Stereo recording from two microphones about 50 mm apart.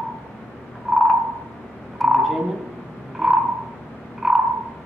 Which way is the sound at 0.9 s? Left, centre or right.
Centre.